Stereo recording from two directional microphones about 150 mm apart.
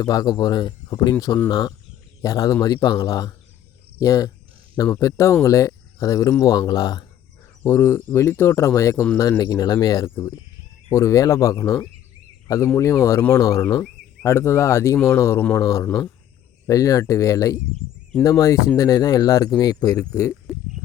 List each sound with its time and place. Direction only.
0.0 s speech: 25° left (ahead or behind)
13.7 s a sound: 5° left (ahead or behind)
14.3 s speech: 20° left (ahead or behind)